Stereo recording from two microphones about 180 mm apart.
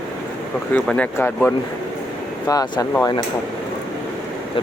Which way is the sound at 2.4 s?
20° left (ahead or behind).